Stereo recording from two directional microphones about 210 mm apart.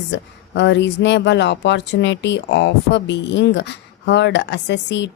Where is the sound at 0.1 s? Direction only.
60° left (ahead or behind).